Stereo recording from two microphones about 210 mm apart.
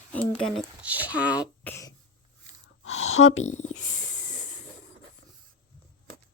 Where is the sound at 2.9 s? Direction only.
70° left (ahead or behind).